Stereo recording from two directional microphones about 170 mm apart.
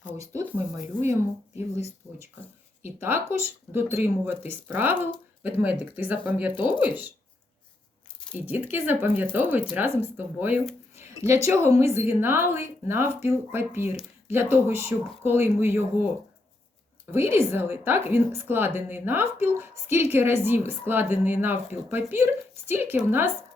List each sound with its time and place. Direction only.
0.0 s speech: 15° right (ahead or behind)
3.0 s a woman's voice: 10° right (ahead or behind)
8.3 s a woman's voice: 10° right (ahead or behind)
17.1 s a woman's voice: 15° right (ahead or behind)